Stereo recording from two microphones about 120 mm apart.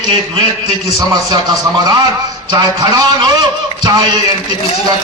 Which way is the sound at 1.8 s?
35° right (ahead or behind).